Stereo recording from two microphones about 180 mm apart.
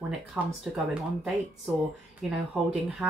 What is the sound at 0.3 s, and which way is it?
Speech, 5° right (ahead or behind).